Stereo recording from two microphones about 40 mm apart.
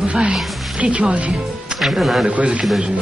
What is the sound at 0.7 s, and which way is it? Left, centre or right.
Speech, right.